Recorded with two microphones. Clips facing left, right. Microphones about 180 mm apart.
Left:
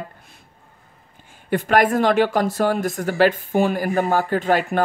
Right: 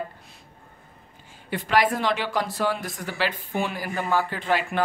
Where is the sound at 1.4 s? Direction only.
50° left (ahead or behind).